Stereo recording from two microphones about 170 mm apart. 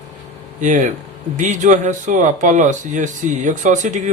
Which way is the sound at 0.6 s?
45° right (ahead or behind).